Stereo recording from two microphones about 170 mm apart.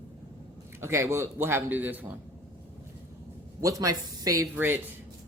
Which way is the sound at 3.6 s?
20° right (ahead or behind).